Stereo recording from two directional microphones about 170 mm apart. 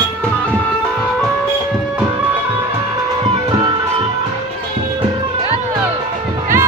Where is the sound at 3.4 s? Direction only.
25° right (ahead or behind).